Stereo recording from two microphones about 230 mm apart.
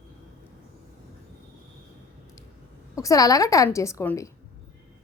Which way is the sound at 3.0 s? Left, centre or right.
Centre.